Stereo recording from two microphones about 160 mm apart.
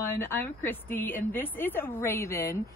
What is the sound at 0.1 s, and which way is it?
Speech, 15° left (ahead or behind).